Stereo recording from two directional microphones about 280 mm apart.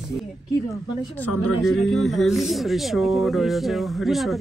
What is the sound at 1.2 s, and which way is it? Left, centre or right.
Speech, left.